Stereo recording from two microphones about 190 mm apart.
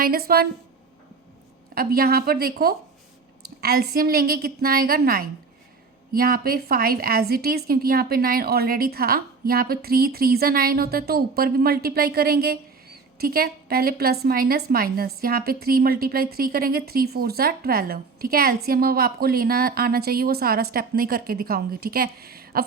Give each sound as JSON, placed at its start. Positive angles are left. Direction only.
{"t": 0.0, "sound": "a woman's voice", "side_deg": -50}
{"t": 1.7, "sound": "a woman's voice", "side_deg": -50}